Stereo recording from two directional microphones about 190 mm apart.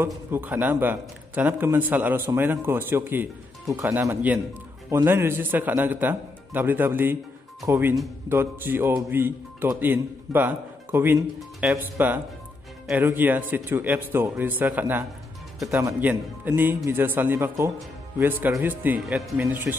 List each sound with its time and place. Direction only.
0.0 s a man's voice: 10° right (ahead or behind)